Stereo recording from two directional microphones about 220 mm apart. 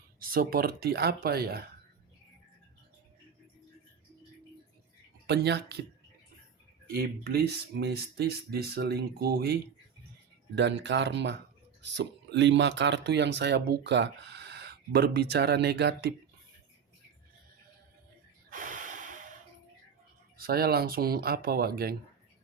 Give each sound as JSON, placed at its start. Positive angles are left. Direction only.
{"t": 0.2, "sound": "speech", "side_deg": -40}
{"t": 5.2, "sound": "speech", "side_deg": -50}
{"t": 6.8, "sound": "speech", "side_deg": -45}
{"t": 18.5, "sound": "snort", "side_deg": -35}
{"t": 20.4, "sound": "speech", "side_deg": -45}